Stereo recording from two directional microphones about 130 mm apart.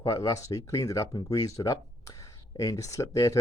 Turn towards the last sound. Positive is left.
turn(degrees=25)  # may be behind; listen again after turning